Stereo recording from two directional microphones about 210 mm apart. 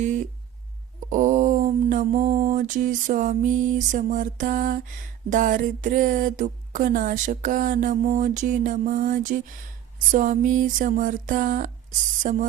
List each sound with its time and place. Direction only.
1.1 s mantra: 35° right (ahead or behind)
2.4 s speech: 35° right (ahead or behind)